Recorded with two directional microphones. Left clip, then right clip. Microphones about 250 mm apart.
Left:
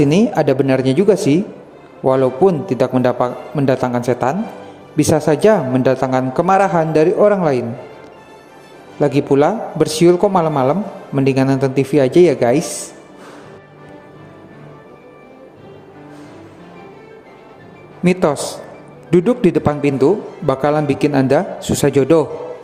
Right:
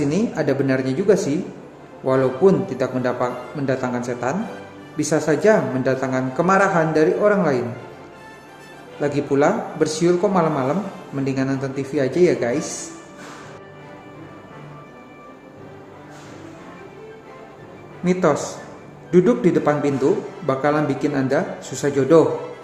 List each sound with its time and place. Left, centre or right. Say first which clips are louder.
0.0 s a man's voice: left 8 dB; left
9.0 s a man's voice: left 6 dB; left
18.0 s a man's voice: left 3 dB; left